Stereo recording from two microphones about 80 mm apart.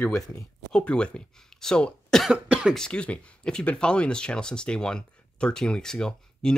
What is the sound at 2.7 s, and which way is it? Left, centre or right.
Speech, centre.